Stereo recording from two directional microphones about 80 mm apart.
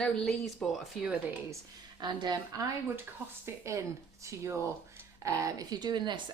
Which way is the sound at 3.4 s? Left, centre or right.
Right.